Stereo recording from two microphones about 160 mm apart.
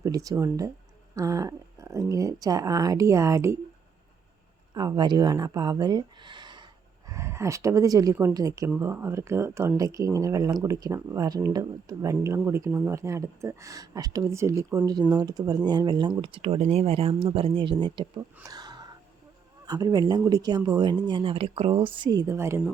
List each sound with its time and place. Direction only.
0.0 s speech: 20° right (ahead or behind)
4.7 s speech: 25° right (ahead or behind)
7.1 s speech: 15° right (ahead or behind)
18.4 s a sound: 25° right (ahead or behind)
19.6 s speech: 25° right (ahead or behind)